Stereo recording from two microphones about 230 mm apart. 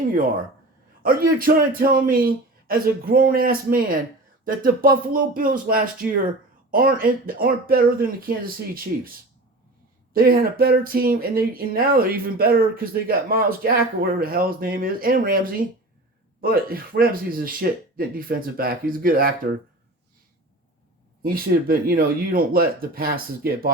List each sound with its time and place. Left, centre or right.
1.0 s speech: right
10.1 s speech: right
21.2 s speech: right